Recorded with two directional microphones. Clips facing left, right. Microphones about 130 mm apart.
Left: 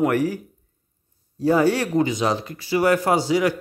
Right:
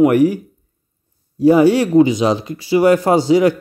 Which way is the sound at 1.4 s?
15° right (ahead or behind).